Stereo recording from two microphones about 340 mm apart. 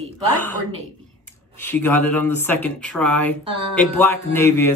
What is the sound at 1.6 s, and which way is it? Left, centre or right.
Speech, centre.